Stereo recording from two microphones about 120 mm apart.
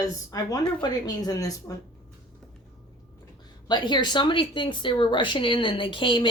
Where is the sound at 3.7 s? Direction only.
40° left (ahead or behind).